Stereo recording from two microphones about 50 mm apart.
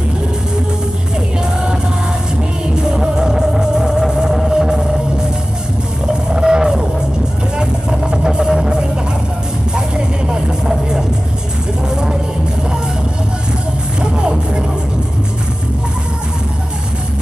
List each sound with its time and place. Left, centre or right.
2.7 s music: centre
6.3 s music: centre
14.1 s music: centre